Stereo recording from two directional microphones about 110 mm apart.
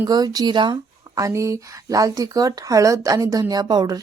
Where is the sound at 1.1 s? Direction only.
30° right (ahead or behind).